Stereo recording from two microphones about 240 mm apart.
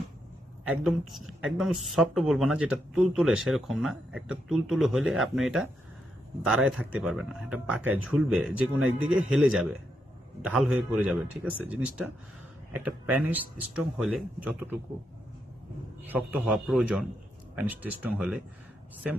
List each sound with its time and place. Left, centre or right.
0.7 s a woman's voice: centre
16.0 s a woman's voice: centre